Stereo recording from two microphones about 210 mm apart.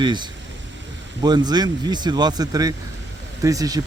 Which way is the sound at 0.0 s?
20° right (ahead or behind).